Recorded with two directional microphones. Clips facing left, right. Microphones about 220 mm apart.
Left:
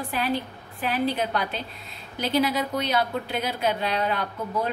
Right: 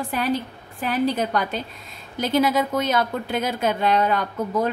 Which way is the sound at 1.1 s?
45° right (ahead or behind).